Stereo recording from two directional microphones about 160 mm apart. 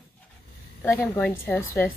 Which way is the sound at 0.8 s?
15° left (ahead or behind).